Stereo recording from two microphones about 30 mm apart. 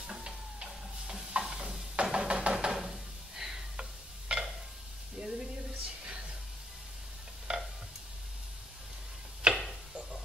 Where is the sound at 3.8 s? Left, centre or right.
Right.